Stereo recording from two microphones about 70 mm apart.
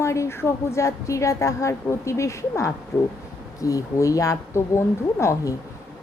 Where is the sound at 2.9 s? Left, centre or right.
Left.